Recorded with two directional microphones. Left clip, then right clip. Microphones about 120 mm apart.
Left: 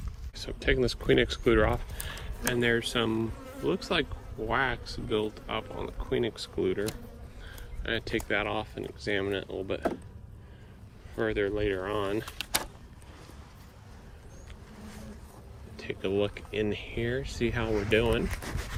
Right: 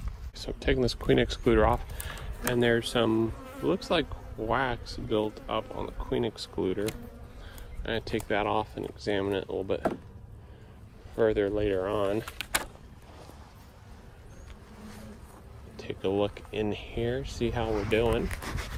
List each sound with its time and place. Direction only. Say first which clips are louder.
0.3 s speech: even; 40° right (ahead or behind)
11.2 s speech: right 3 dB; 50° right (ahead or behind)
15.7 s speech: right 1 dB; 25° right (ahead or behind)
17.8 s speech: left 1 dB; 5° right (ahead or behind)